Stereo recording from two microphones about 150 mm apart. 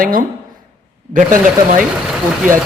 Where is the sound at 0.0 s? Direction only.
70° right (ahead or behind).